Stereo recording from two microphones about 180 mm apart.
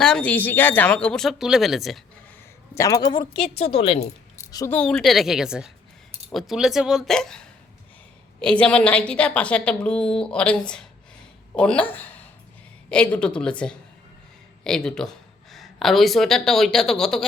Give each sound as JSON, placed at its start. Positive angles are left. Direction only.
{"t": 0.0, "sound": "a woman's voice", "side_deg": 5}
{"t": 2.7, "sound": "a woman's voice", "side_deg": 20}
{"t": 4.4, "sound": "a woman's voice", "side_deg": 15}